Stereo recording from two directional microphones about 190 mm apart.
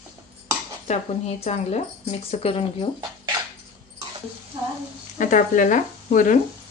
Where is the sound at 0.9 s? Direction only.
35° left (ahead or behind).